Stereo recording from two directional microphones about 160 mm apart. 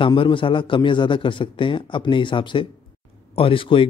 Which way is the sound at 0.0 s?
30° left (ahead or behind).